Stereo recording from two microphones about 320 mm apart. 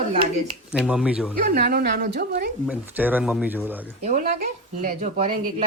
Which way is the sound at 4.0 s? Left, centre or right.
Right.